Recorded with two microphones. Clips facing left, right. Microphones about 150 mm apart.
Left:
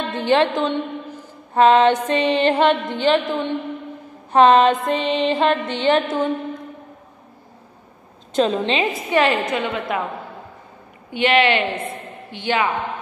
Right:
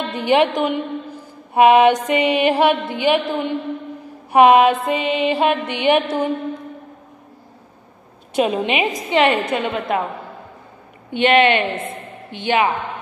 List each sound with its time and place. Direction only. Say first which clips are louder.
0.1 s music: right 1 dB; 15° right (ahead or behind)
0.6 s a sound: right 1 dB; 10° right (ahead or behind)
4.3 s music: right 1 dB; 10° right (ahead or behind)
8.3 s a woman's voice: even; 10° right (ahead or behind)
11.1 s a woman's voice: right 3 dB; 25° right (ahead or behind)